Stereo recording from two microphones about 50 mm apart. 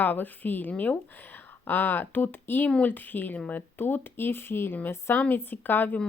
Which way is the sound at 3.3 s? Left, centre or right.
Left.